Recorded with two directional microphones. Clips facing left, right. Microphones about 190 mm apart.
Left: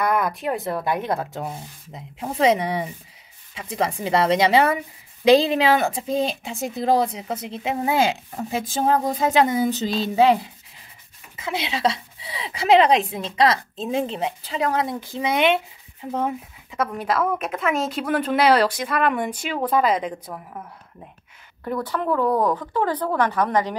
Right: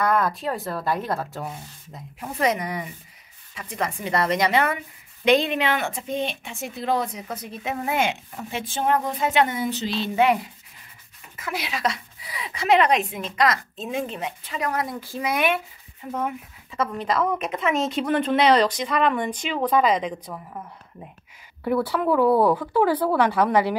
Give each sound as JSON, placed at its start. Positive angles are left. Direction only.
{"t": 0.0, "sound": "a woman's voice", "side_deg": 15}
{"t": 16.7, "sound": "speech", "side_deg": 10}
{"t": 21.6, "sound": "speech", "side_deg": -10}